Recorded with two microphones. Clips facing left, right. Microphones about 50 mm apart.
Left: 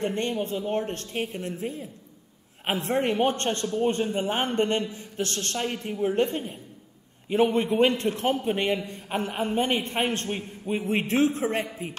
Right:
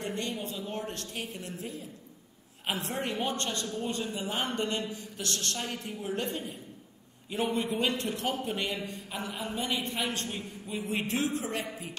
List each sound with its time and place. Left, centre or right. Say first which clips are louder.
0.0 s a man's voice: left 7 dB; left